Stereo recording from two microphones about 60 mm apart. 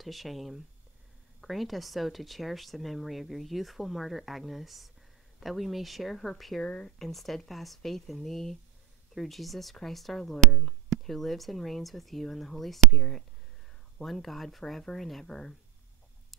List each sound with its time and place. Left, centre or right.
0.0 s speech: centre
6.6 s speech: centre
7.0 s speech: centre